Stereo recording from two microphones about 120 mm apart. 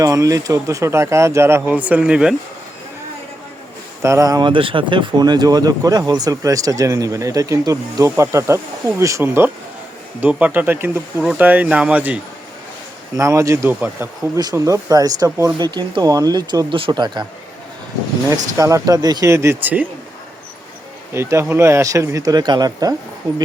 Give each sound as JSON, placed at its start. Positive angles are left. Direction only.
{"t": 0.0, "sound": "speech", "side_deg": -25}
{"t": 4.0, "sound": "speech", "side_deg": -25}
{"t": 4.4, "sound": "speech", "side_deg": -45}
{"t": 13.1, "sound": "speech", "side_deg": -25}
{"t": 13.7, "sound": "speech", "side_deg": -15}
{"t": 14.5, "sound": "speech", "side_deg": -25}
{"t": 18.5, "sound": "speech", "side_deg": -30}
{"t": 21.1, "sound": "speech", "side_deg": -20}